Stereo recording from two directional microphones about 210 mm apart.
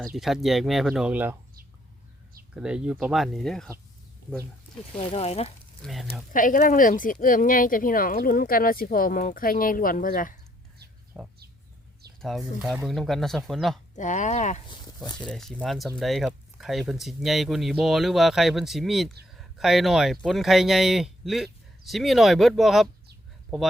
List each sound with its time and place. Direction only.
0.0 s speech: centre (ahead or behind)
2.6 s speech: 5° right (ahead or behind)
4.9 s speech: 30° left (ahead or behind)
5.8 s speech: centre (ahead or behind)
6.3 s speech: 40° left (ahead or behind)
11.1 s speech: centre (ahead or behind)
13.9 s speech: 35° left (ahead or behind)
14.7 s speech: 20° left (ahead or behind)
15.3 s speech: centre (ahead or behind)